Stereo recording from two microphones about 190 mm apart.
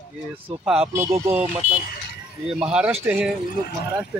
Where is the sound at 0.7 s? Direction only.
5° right (ahead or behind).